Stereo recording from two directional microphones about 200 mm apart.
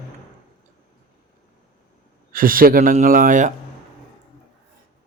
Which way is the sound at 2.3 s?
45° right (ahead or behind).